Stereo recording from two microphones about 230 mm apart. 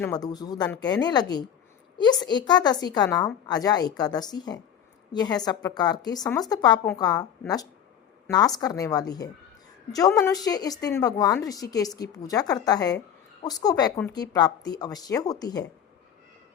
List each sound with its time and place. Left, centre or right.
0.0 s a woman's voice: centre
6.2 s speech: centre
6.5 s a woman's voice: centre